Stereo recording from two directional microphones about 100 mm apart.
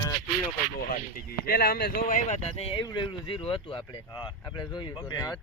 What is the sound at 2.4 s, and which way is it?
Speech, 90° left.